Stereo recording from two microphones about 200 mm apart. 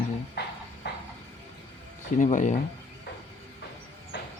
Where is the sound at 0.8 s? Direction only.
55° left (ahead or behind).